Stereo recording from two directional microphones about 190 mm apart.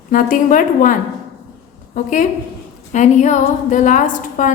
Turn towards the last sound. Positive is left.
turn(degrees=40)  # may be behind; listen again after turning